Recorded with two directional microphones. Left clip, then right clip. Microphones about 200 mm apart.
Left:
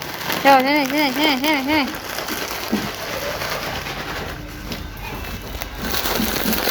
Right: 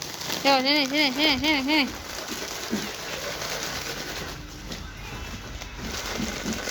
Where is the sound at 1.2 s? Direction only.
15° left (ahead or behind).